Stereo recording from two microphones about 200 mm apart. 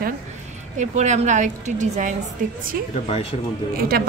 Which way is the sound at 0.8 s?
35° right (ahead or behind).